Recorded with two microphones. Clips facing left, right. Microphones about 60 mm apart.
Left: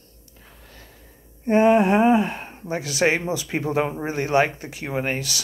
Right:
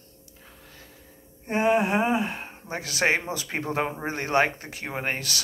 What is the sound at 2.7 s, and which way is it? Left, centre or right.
Speech, right.